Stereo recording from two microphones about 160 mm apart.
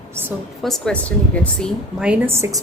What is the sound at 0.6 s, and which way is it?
Speech, 5° left (ahead or behind).